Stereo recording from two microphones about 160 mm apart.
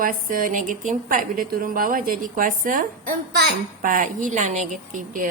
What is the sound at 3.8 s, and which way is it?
Speech, 55° right (ahead or behind).